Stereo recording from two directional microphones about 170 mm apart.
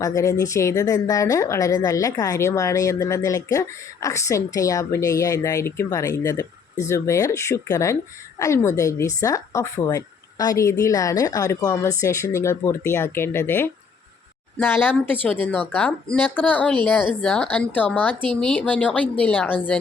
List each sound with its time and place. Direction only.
0.0 s a woman's voice: 20° left (ahead or behind)
18.1 s speech: 30° right (ahead or behind)
18.3 s speech: 5° left (ahead or behind)